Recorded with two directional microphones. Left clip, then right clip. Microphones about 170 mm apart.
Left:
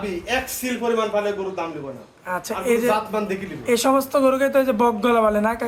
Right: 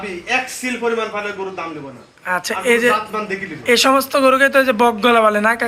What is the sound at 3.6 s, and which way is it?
Speech, centre (ahead or behind).